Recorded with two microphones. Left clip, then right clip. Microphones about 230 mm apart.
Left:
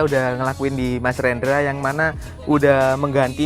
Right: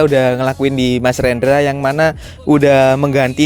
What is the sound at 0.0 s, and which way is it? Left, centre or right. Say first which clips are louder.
Speech: right 7 dB; right.